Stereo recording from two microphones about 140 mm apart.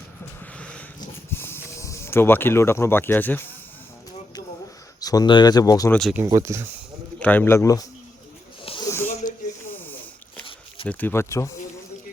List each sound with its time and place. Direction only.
0.6 s cat: 10° left (ahead or behind)
1.3 s speech: 15° left (ahead or behind)
4.9 s speech: 25° left (ahead or behind)
5.9 s speech: centre (ahead or behind)
6.2 s speech: 20° right (ahead or behind)
7.2 s a man's voice: 10° left (ahead or behind)
8.8 s wheeze: 20° left (ahead or behind)
10.8 s a man's voice: 15° left (ahead or behind)